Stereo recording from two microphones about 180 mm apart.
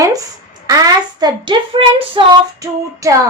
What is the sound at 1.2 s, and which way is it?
Female singing, 25° right (ahead or behind).